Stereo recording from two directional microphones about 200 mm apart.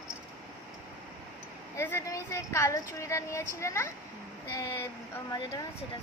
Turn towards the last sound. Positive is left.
turn(degrees=15)  # may be behind; listen again after turning